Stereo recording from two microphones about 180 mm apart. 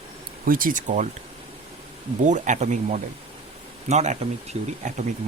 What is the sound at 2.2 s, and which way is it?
Speech, 40° right (ahead or behind).